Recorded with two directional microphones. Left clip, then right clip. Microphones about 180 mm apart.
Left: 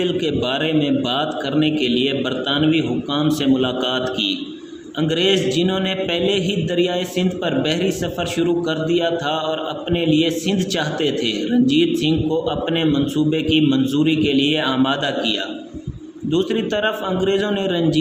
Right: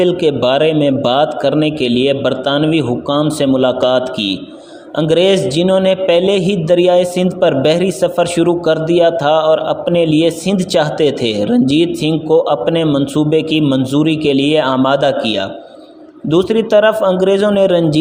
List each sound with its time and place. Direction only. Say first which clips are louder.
0.0 s a man's voice: right 8 dB; 40° right (ahead or behind)